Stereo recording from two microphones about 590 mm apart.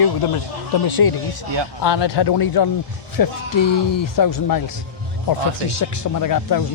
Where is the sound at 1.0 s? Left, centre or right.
Left.